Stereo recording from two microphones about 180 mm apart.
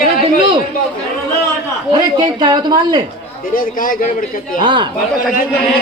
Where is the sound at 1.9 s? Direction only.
25° right (ahead or behind).